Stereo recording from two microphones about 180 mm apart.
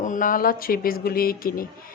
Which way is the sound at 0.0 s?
45° left (ahead or behind).